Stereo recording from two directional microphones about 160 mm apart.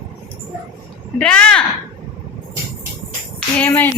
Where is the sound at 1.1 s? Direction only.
5° left (ahead or behind).